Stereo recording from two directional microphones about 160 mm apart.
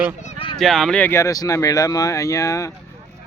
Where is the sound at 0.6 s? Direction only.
Centre (ahead or behind); by 2.6 s 20° left (ahead or behind).